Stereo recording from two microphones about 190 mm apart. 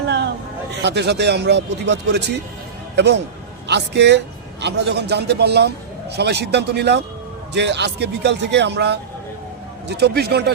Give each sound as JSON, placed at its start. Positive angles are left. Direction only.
{"t": 0.8, "sound": "a man's voice", "side_deg": -65}